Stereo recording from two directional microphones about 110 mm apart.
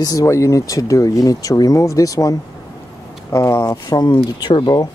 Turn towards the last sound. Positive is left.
turn(degrees=40)  # may be behind; listen again after turning